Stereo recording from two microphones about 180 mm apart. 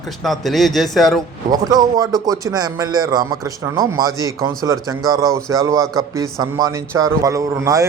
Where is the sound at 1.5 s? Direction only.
20° right (ahead or behind).